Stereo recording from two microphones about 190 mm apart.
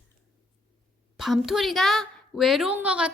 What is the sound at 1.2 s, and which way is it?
A woman's voice, centre (ahead or behind).